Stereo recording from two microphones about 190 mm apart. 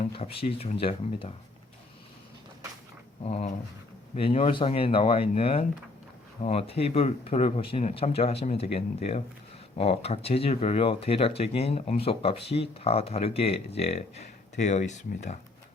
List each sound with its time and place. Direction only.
0.0 s speech: 30° left (ahead or behind)
3.2 s speech: 35° left (ahead or behind)